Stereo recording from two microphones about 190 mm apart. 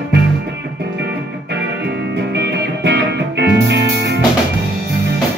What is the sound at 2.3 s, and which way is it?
Music, 65° right (ahead or behind).